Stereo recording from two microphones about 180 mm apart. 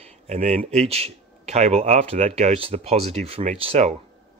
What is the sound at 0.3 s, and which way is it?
Speech, 40° right (ahead or behind).